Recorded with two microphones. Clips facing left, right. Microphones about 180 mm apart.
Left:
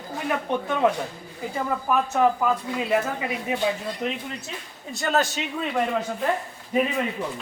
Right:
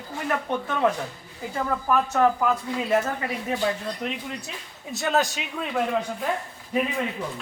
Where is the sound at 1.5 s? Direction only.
5° left (ahead or behind).